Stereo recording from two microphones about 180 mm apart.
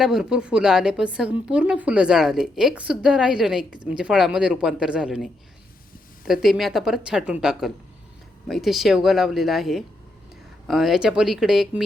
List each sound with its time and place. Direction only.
0.0 s a woman's voice: 5° right (ahead or behind)